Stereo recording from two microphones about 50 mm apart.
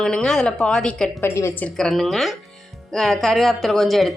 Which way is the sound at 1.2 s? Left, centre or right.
Left.